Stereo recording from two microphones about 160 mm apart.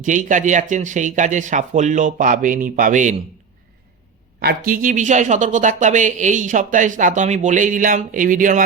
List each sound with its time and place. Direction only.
0.0 s speech: 50° right (ahead or behind)
4.4 s speech: 70° right (ahead or behind)